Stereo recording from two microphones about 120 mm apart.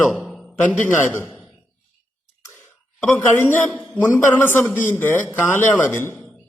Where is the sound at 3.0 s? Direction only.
15° left (ahead or behind).